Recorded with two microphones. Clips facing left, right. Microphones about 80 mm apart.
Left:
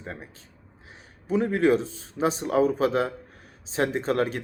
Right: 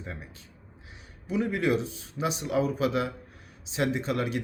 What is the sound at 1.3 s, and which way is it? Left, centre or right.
A man's voice, left.